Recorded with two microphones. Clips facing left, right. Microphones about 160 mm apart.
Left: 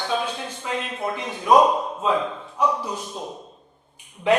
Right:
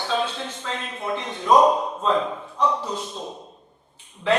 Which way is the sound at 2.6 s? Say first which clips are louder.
Even; 10° left (ahead or behind).